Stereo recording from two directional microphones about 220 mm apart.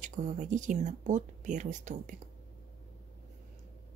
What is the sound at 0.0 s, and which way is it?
Speech, 35° right (ahead or behind).